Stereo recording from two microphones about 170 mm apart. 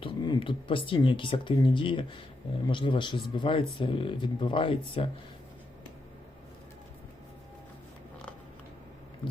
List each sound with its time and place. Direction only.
0.0 s speech: 25° left (ahead or behind)